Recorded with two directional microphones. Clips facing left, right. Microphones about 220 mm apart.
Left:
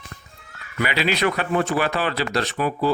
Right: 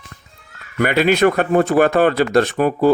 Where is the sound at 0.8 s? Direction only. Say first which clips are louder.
Right 8 dB; 50° right (ahead or behind).